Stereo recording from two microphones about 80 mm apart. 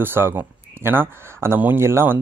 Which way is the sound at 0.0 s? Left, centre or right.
Right.